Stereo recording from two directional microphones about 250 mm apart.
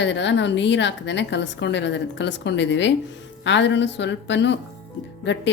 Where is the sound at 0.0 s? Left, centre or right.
Left.